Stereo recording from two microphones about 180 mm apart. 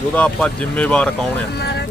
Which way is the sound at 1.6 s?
65° left (ahead or behind).